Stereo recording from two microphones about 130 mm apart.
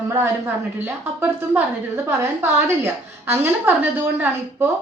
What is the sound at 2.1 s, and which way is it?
A woman's voice, 20° right (ahead or behind).